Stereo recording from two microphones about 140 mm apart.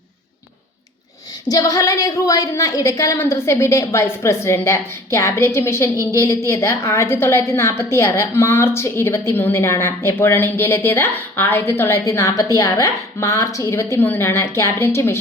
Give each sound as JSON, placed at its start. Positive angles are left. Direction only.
{"t": 1.5, "sound": "a woman's voice", "side_deg": 25}